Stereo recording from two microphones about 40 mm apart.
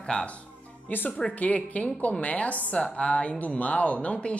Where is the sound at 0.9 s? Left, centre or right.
Left.